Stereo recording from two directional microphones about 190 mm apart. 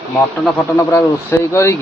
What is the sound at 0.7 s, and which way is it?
Speech, 15° left (ahead or behind).